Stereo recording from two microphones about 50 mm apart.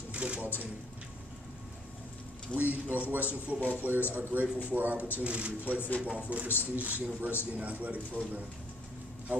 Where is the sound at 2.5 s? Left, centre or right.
Right.